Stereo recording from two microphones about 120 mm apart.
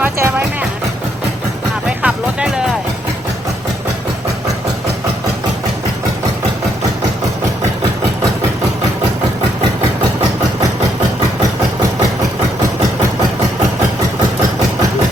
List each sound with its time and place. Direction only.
0.0 s music: 20° right (ahead or behind)
2.0 s music: 10° right (ahead or behind)